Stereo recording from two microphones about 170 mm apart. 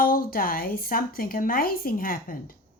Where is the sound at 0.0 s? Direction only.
55° left (ahead or behind).